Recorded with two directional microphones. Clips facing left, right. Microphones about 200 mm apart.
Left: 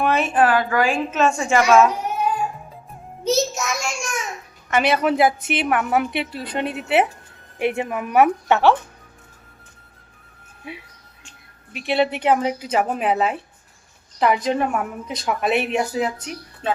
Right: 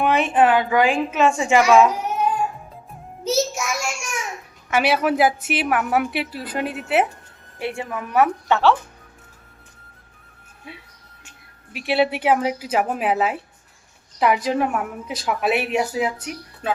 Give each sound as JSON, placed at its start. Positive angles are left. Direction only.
{"t": 0.0, "sound": "a woman's voice", "side_deg": -15}
{"t": 3.2, "sound": "a child's voice", "side_deg": -10}
{"t": 7.6, "sound": "a woman's voice", "side_deg": 20}
{"t": 11.3, "sound": "a woman's voice", "side_deg": -5}